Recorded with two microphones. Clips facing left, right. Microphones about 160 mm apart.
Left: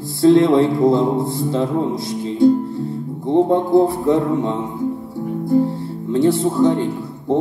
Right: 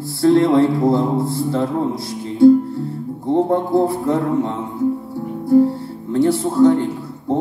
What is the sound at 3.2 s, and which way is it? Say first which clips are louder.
A man's voice: left 2 dB; 20° left (ahead or behind).